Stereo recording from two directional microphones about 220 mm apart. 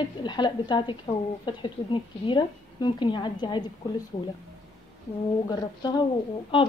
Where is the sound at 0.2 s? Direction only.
20° left (ahead or behind).